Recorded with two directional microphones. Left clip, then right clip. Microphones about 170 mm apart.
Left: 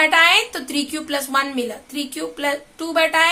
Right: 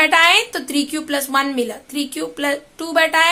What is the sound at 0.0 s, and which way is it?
A woman's voice, 25° right (ahead or behind).